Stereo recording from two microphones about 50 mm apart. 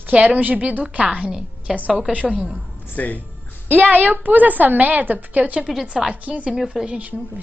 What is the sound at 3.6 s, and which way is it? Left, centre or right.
A woman's voice, right.